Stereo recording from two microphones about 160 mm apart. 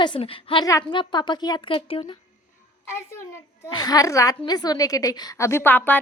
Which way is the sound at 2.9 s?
15° left (ahead or behind).